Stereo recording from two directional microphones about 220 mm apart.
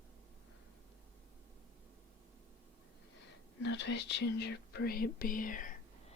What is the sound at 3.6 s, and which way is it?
Speech, 55° left (ahead or behind).